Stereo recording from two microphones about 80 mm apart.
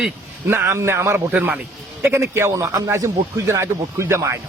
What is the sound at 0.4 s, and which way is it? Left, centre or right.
Speech, right.